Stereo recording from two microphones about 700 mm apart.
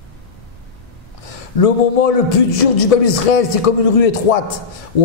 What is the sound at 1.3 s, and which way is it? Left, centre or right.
A man's voice, left.